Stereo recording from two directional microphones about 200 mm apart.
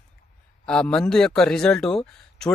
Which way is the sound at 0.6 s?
5° left (ahead or behind).